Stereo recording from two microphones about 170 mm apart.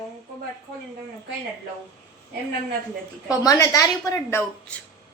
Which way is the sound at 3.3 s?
20° left (ahead or behind).